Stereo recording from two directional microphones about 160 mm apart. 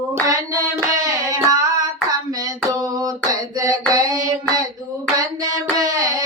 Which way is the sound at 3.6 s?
20° right (ahead or behind).